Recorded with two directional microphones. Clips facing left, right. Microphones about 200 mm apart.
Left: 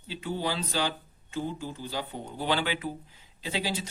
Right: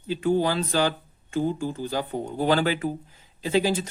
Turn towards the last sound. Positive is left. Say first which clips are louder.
# right 9 dB
turn(degrees=-50)  # may be behind; listen again after turning